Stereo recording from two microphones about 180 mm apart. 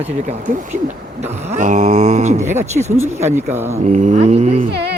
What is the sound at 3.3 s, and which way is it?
Speech, 10° right (ahead or behind).